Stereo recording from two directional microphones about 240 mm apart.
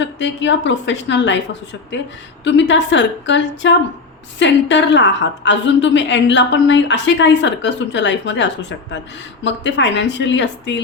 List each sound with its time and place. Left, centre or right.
0.0 s a woman's voice: left
2.4 s a woman's voice: left